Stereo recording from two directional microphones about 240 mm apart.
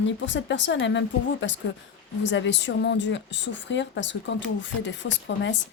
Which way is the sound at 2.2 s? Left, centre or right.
Left.